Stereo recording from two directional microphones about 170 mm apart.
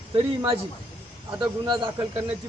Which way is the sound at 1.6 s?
25° right (ahead or behind).